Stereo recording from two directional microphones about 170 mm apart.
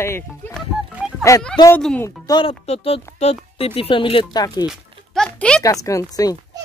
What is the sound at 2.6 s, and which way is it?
Speech, 35° left (ahead or behind).